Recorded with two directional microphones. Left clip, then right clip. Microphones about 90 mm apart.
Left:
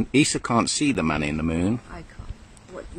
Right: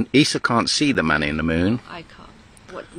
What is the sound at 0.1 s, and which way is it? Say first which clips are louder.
Speech: right 4 dB; 25° right (ahead or behind).